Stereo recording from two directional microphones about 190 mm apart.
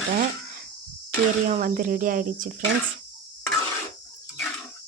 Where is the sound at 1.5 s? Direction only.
45° right (ahead or behind).